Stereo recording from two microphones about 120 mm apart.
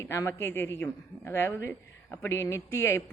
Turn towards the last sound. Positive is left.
turn(degrees=20)  # may be behind; listen again after turning